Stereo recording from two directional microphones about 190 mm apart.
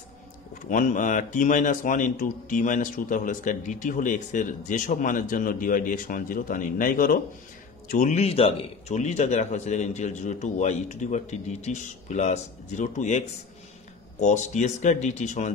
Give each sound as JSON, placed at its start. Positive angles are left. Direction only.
{"t": 0.7, "sound": "a man's voice", "side_deg": 45}
{"t": 14.2, "sound": "a man's voice", "side_deg": 40}